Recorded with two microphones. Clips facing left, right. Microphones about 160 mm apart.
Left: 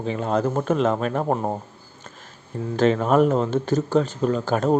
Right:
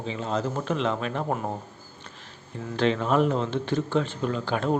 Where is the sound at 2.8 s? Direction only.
45° left (ahead or behind).